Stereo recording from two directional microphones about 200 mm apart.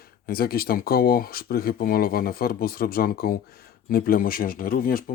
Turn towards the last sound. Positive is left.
turn(degrees=45)  # may be behind; listen again after turning